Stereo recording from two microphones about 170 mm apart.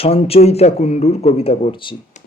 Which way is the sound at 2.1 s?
45° left (ahead or behind).